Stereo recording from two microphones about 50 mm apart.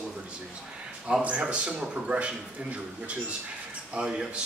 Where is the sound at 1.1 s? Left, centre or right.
Centre.